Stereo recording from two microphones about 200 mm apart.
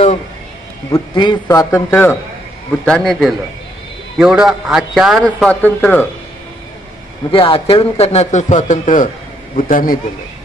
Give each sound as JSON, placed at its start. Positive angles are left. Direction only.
{"t": 0.9, "sound": "a man's voice", "side_deg": 20}
{"t": 7.2, "sound": "a man's voice", "side_deg": 25}